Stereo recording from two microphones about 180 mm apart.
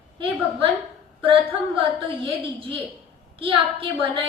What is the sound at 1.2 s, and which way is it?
A woman's voice, 30° right (ahead or behind).